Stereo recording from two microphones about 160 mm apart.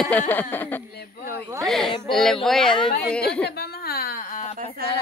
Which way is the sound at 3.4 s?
80° left.